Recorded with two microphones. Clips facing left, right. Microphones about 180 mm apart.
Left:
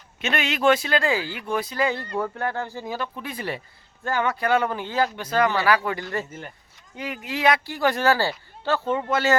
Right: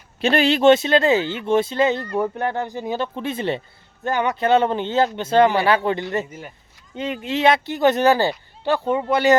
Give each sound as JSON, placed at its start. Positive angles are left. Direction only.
{"t": 0.2, "sound": "speech", "side_deg": -35}